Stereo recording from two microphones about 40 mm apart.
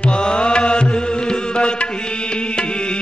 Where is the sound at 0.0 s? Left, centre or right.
Left.